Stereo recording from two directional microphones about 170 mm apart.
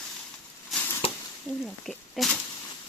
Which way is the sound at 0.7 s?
10° left (ahead or behind).